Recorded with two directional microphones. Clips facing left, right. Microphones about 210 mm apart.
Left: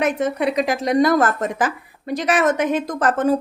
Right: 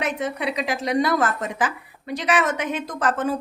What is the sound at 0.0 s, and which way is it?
A woman's voice, 45° left (ahead or behind).